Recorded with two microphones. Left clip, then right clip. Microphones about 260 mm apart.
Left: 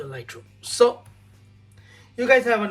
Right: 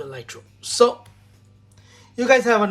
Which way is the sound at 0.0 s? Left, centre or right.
Centre.